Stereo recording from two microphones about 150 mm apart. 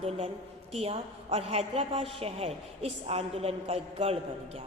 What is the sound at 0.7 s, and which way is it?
A woman's voice, 40° right (ahead or behind).